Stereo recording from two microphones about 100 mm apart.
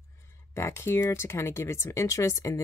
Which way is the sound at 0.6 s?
25° left (ahead or behind).